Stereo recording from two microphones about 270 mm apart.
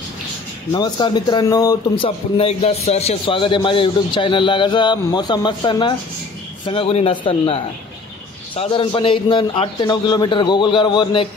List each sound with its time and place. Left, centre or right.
0.7 s a man's voice: centre